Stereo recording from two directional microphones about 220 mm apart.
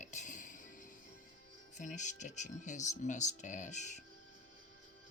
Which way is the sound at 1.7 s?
35° left (ahead or behind).